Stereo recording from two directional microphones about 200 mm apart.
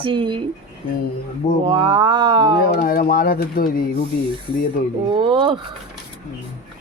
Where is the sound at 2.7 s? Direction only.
50° left (ahead or behind).